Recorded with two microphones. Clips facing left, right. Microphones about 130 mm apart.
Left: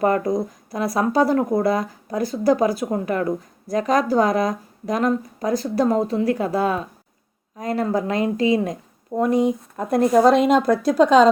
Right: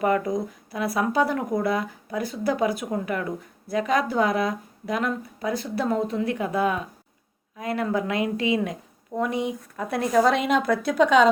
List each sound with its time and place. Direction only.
0.0 s speech: 40° left (ahead or behind)
10.1 s a woman's voice: 25° left (ahead or behind)
10.4 s speech: 45° left (ahead or behind)